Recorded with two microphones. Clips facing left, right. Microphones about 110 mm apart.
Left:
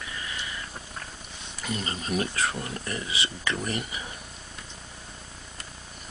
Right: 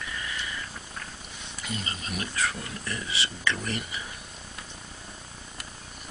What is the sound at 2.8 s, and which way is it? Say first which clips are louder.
Speech: left 1 dB; 20° left (ahead or behind).